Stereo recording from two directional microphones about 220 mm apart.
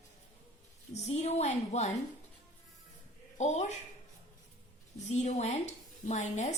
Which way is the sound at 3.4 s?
30° left (ahead or behind).